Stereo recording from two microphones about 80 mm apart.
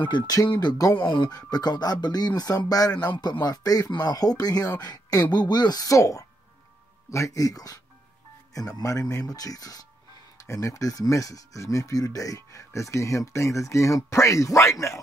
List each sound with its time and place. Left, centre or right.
0.3 s speech: left
0.9 s speech: left